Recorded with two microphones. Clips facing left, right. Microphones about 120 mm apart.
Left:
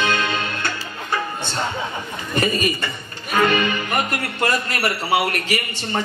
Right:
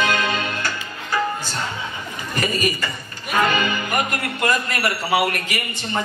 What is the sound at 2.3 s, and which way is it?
A man's voice, 30° left (ahead or behind).